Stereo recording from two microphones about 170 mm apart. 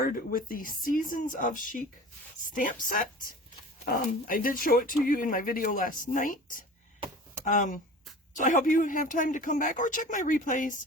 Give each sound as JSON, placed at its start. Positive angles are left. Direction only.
{"t": 0.0, "sound": "speech", "side_deg": 55}
{"t": 3.8, "sound": "speech", "side_deg": 60}